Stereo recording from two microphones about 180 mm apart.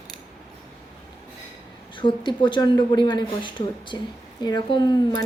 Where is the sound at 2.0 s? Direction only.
25° left (ahead or behind).